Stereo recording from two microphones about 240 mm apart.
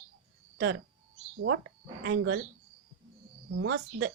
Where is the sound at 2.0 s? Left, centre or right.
Right.